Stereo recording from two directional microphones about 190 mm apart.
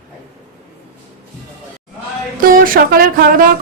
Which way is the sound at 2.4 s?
50° right (ahead or behind).